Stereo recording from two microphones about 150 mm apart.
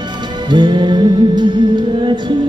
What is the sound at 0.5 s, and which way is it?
Music, 30° right (ahead or behind).